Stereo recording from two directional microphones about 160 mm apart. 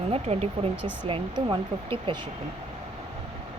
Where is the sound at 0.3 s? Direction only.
40° right (ahead or behind).